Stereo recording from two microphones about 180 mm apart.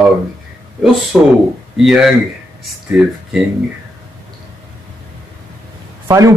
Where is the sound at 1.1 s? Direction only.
Centre (ahead or behind).